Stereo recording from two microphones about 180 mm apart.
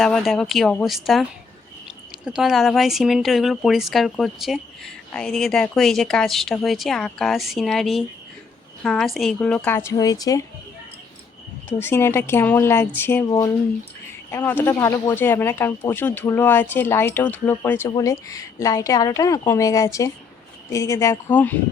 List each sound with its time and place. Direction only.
0.0 s speech: centre (ahead or behind); by 10.4 s 20° left (ahead or behind)
11.8 s speech: 15° left (ahead or behind)